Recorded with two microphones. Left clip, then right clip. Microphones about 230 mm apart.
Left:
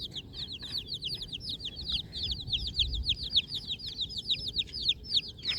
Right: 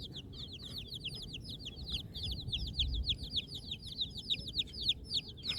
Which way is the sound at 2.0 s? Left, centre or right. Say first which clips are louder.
Left 8 dB; centre.